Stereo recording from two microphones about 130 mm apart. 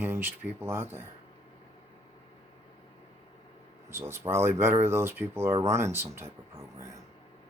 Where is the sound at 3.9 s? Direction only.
20° right (ahead or behind).